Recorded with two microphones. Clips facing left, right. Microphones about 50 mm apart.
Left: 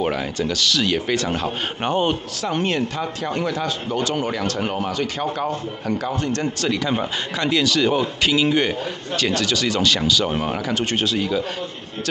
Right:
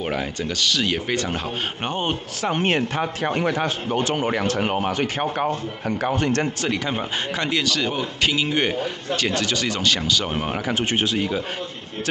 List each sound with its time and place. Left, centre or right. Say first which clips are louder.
0.1 s speech: left 2 dB; centre
2.4 s speech: right 1 dB; right
6.0 s speech: right 6 dB; right
6.6 s speech: left 3 dB; centre